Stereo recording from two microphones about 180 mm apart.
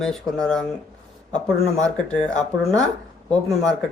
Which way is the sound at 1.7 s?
5° left (ahead or behind).